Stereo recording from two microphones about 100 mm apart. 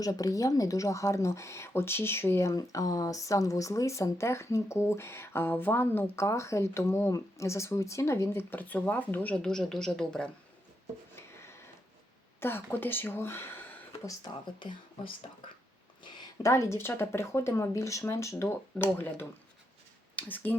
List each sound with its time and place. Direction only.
0.0 s speech: 35° left (ahead or behind); by 10.3 s 10° left (ahead or behind)
11.1 s a sound: 25° left (ahead or behind)
12.4 s speech: 20° left (ahead or behind)
16.4 s speech: 30° left (ahead or behind)